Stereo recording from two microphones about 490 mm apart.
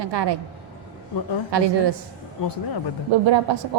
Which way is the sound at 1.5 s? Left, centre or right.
Right.